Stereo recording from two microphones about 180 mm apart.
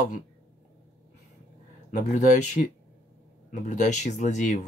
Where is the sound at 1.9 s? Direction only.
45° left (ahead or behind).